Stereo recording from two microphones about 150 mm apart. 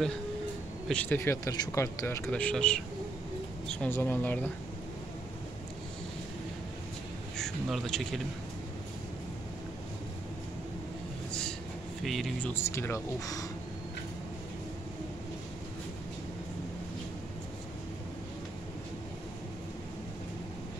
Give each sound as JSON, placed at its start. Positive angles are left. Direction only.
{"t": 0.8, "sound": "speech", "side_deg": 10}
{"t": 2.2, "sound": "speech", "side_deg": 5}
{"t": 7.3, "sound": "speech", "side_deg": 5}
{"t": 12.0, "sound": "speech", "side_deg": 0}